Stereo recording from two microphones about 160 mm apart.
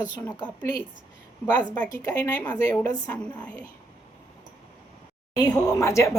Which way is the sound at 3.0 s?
10° left (ahead or behind).